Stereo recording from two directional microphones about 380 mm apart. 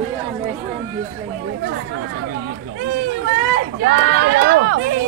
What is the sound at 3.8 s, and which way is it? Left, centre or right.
Speech, right.